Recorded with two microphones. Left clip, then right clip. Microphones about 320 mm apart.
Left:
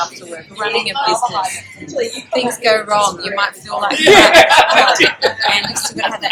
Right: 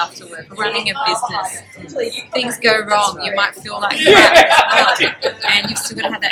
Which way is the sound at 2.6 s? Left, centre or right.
Centre.